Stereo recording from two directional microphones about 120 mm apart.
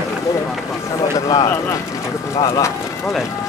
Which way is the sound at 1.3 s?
30° left (ahead or behind).